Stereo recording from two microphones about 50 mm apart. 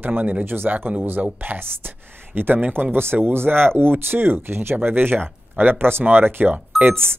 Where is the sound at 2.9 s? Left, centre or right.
Right.